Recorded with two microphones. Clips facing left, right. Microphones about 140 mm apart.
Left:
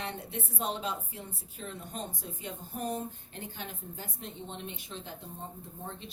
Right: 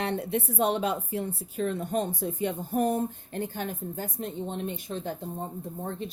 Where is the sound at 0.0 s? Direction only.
65° right (ahead or behind).